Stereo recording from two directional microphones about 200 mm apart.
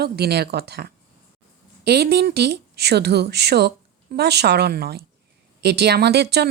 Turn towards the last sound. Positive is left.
turn(degrees=-55)  # may be behind; listen again after turning